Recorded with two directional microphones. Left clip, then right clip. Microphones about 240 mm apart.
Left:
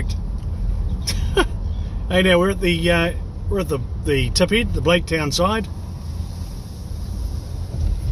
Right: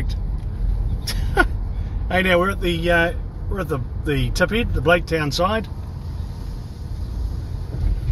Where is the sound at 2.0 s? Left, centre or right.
Centre.